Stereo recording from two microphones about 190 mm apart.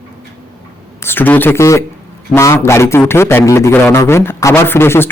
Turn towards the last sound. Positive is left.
turn(degrees=10)  # may be behind; listen again after turning